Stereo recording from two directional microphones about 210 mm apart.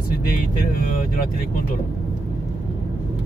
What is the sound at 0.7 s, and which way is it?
Speech, 45° left (ahead or behind).